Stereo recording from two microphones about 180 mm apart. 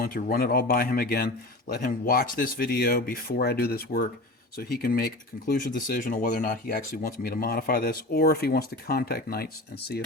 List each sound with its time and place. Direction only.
0.0 s speech: 55° left (ahead or behind)